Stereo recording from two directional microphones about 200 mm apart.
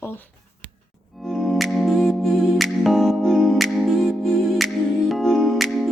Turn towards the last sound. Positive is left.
turn(degrees=0)  # may be behind; listen again after turning